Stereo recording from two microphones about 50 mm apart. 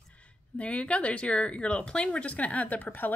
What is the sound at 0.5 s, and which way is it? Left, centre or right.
Speech, left.